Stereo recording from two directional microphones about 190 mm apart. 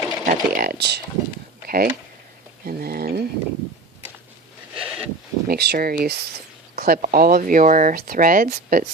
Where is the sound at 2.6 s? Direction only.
50° right (ahead or behind).